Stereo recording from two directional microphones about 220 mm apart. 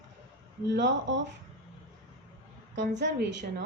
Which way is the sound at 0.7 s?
55° right (ahead or behind).